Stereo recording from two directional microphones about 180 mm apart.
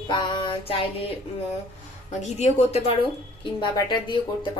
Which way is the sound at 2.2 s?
35° left (ahead or behind).